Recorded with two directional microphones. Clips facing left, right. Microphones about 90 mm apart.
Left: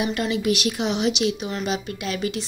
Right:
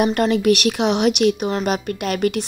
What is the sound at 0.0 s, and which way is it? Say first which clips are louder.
Speech: right 7 dB; 55° right (ahead or behind).